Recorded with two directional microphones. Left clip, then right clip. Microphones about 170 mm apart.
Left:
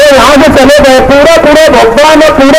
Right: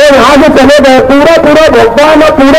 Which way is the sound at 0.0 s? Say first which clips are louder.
Even; 35° left (ahead or behind).